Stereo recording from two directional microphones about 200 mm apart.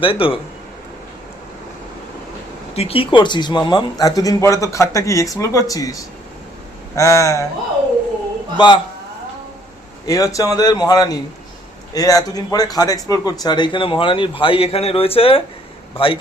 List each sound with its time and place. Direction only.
0.0 s speech: 25° left (ahead or behind)
2.7 s speech: 30° left (ahead or behind)
8.5 s speech: 25° left (ahead or behind)
10.1 s speech: 15° left (ahead or behind)